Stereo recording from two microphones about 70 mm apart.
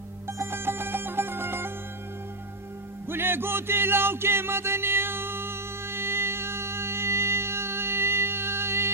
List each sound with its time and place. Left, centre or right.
0.3 s music: right
3.1 s music: right